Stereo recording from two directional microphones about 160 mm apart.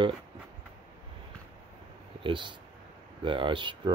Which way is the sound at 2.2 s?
30° right (ahead or behind).